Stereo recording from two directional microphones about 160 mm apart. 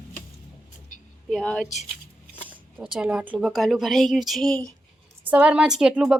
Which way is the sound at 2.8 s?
5° right (ahead or behind).